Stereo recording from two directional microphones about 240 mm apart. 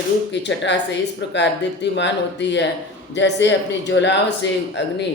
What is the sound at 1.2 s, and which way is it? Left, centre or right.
Speech, left.